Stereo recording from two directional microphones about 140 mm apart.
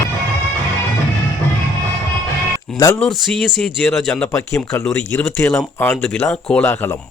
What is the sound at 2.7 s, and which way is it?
Speech, 20° left (ahead or behind).